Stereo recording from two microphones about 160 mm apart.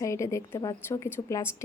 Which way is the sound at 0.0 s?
20° left (ahead or behind).